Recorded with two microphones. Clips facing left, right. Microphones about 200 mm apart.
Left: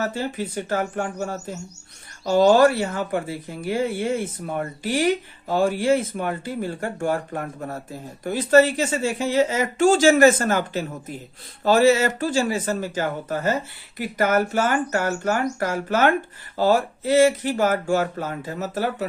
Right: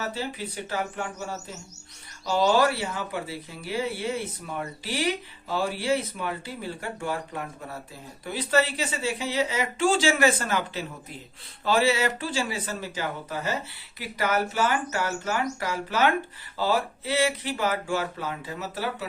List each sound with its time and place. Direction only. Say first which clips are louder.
0.0 s speech: left 6 dB; 50° left (ahead or behind)